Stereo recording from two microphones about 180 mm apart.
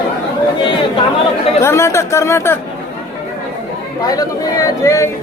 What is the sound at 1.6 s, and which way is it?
Speech, 15° left (ahead or behind).